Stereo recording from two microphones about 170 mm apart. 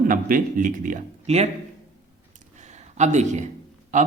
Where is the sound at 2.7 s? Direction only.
45° right (ahead or behind).